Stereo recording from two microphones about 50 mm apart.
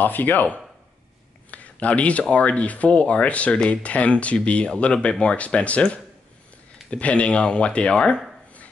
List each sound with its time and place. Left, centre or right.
0.0 s speech: left
1.5 s a sound: left
2.3 s speech: left